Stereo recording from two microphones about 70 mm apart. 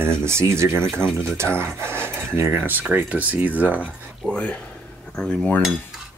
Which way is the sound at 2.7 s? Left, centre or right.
Right.